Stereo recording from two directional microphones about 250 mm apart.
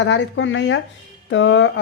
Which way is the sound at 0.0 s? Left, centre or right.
Left.